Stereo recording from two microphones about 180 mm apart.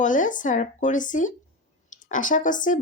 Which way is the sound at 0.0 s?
45° left (ahead or behind).